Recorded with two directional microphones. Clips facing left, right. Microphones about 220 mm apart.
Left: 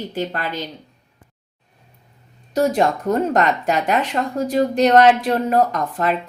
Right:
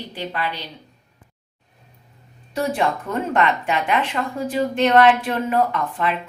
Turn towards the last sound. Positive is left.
turn(degrees=40)  # may be behind; listen again after turning